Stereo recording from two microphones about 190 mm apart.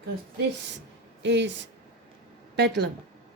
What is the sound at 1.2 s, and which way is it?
Speech, 65° right (ahead or behind).